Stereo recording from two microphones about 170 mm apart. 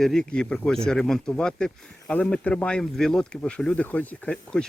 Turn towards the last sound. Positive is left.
turn(degrees=5)  # may be behind; listen again after turning